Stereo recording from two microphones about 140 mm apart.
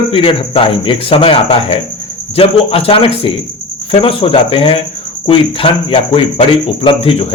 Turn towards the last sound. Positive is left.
turn(degrees=45)  # may be behind; listen again after turning